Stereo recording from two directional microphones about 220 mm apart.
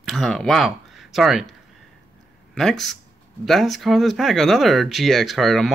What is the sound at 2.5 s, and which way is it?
Speech, centre (ahead or behind).